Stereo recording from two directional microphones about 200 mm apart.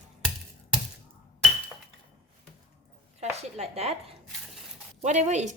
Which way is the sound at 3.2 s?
30° right (ahead or behind).